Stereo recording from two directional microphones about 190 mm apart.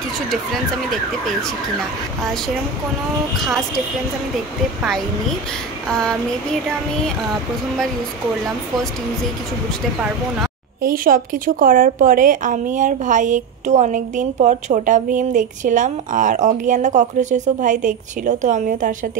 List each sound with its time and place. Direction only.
3.3 s a woman's voice: centre (ahead or behind)
5.9 s a woman's voice: 5° left (ahead or behind)
10.8 s a woman's voice: 45° right (ahead or behind)